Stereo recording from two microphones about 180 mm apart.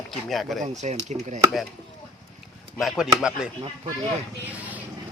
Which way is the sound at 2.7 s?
Centre (ahead or behind).